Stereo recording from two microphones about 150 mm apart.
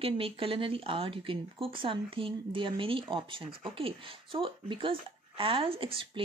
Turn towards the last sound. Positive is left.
turn(degrees=-35)  # may be behind; listen again after turning